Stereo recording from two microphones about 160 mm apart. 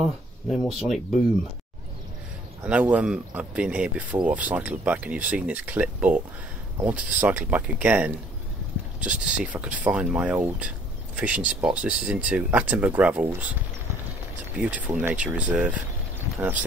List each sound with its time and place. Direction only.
0.0 s speech: centre (ahead or behind)
2.6 s speech: 10° right (ahead or behind)
14.6 s speech: 10° right (ahead or behind)